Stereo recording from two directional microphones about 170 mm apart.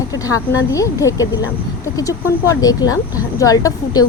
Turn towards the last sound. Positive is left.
turn(degrees=20)  # may be behind; listen again after turning